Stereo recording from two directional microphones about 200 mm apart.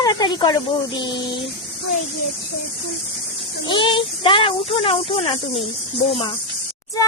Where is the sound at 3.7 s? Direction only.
25° left (ahead or behind).